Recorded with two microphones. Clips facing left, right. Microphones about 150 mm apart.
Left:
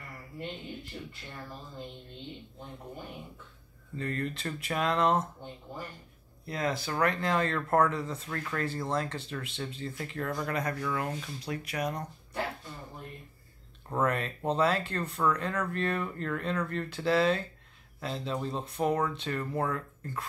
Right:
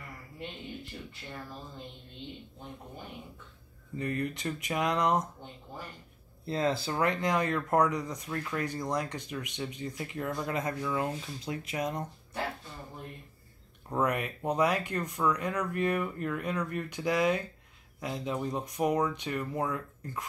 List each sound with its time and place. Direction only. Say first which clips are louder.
3.9 s speech: right 1 dB; 15° right (ahead or behind)
6.4 s speech: right 3 dB; 25° right (ahead or behind)
13.8 s speech: even; 15° right (ahead or behind)